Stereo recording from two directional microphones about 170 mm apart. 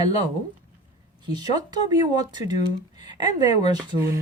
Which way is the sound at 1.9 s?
25° right (ahead or behind).